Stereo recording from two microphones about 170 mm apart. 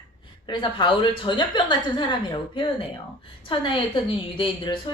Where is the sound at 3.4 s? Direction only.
30° left (ahead or behind).